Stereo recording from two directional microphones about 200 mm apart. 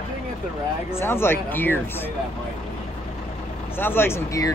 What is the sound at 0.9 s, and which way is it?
Speech, 10° left (ahead or behind).